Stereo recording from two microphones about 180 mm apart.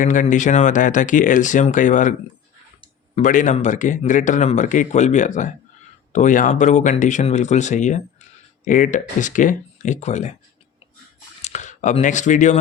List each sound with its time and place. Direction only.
0.0 s speech: 45° left (ahead or behind)
3.2 s speech: 45° left (ahead or behind)
11.4 s speech: 40° left (ahead or behind)